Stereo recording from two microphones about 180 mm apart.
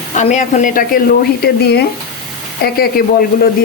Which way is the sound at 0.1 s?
40° left (ahead or behind).